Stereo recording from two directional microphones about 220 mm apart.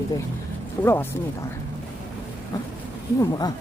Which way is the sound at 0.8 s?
10° left (ahead or behind).